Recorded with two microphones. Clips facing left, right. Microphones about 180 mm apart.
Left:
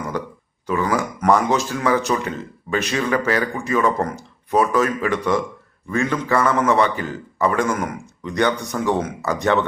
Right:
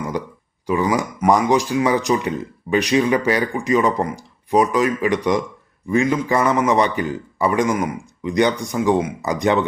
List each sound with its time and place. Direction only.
0.7 s speech: 15° right (ahead or behind)